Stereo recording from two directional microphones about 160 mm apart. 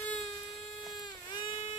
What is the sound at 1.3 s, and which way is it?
Baby cry, 35° left (ahead or behind).